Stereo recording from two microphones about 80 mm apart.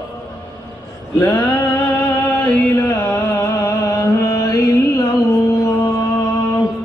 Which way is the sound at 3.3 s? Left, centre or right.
Left.